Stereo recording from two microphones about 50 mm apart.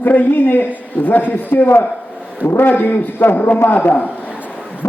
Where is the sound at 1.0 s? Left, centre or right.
Left.